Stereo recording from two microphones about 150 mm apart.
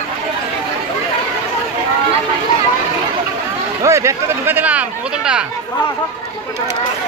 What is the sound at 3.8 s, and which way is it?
Speech, 20° right (ahead or behind).